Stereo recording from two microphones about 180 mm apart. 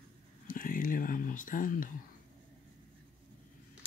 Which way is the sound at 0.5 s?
50° left (ahead or behind).